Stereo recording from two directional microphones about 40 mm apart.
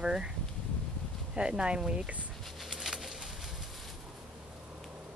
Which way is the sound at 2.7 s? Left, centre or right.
Centre.